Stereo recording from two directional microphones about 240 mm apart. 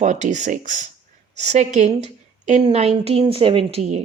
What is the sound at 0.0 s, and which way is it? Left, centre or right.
A woman's voice, right.